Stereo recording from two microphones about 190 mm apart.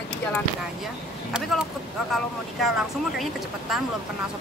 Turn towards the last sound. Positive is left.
turn(degrees=0)  # may be behind; listen again after turning